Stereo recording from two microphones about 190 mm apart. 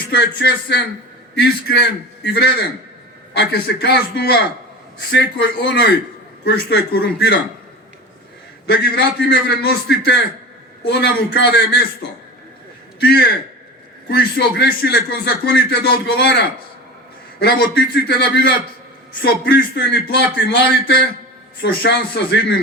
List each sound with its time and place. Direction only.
0.1 s speech: 60° left (ahead or behind)
8.6 s speech: 60° left (ahead or behind)
13.0 s a man's voice: 60° left (ahead or behind)
17.4 s speech: 60° left (ahead or behind)